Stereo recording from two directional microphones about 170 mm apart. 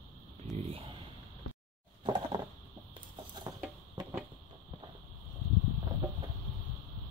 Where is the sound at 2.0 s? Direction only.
30° right (ahead or behind).